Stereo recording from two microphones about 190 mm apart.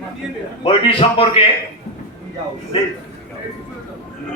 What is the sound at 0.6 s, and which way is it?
Speech, 30° left (ahead or behind).